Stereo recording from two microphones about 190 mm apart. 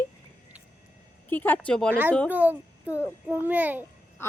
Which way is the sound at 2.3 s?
10° right (ahead or behind).